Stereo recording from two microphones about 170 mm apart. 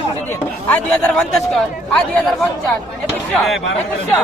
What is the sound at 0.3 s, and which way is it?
Speech, 10° left (ahead or behind).